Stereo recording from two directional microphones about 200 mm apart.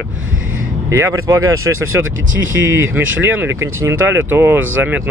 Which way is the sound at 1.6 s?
90° right.